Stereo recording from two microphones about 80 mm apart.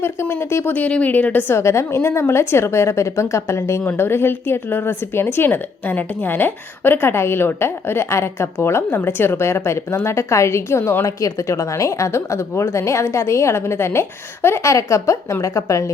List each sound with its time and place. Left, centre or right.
0.0 s speech: left